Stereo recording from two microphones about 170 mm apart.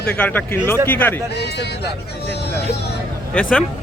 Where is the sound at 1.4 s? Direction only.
75° left (ahead or behind).